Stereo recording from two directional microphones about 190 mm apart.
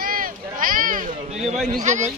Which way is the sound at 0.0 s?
45° right (ahead or behind).